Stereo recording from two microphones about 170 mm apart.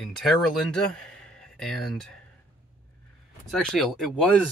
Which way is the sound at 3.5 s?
5° left (ahead or behind).